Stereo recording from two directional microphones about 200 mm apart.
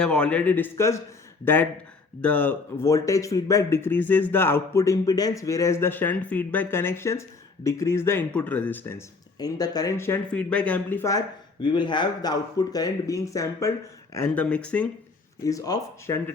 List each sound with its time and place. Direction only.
0.0 s speech: 5° left (ahead or behind)
11.6 s speech: 25° left (ahead or behind); by 14.8 s 5° left (ahead or behind)
15.4 s speech: 15° left (ahead or behind)